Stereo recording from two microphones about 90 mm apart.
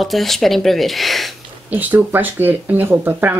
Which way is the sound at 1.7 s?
20° right (ahead or behind).